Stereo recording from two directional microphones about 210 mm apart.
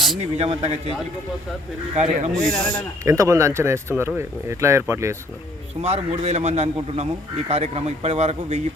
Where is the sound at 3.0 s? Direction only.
15° right (ahead or behind).